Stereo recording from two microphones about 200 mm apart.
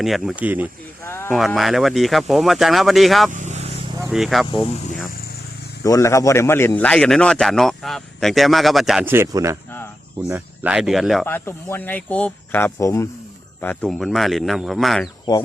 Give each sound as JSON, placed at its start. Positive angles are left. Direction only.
{"t": 0.0, "sound": "a man's voice", "side_deg": 0}
{"t": 1.0, "sound": "speech", "side_deg": 10}
{"t": 1.3, "sound": "a man's voice", "side_deg": 0}
{"t": 3.3, "sound": "vehicle", "side_deg": -35}
{"t": 4.1, "sound": "a man's voice", "side_deg": 0}
{"t": 4.6, "sound": "speech", "side_deg": 35}
{"t": 5.8, "sound": "a man's voice", "side_deg": 15}
{"t": 11.3, "sound": "a man's voice", "side_deg": 10}